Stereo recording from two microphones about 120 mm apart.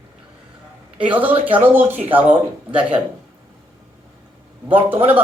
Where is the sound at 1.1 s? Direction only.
15° right (ahead or behind).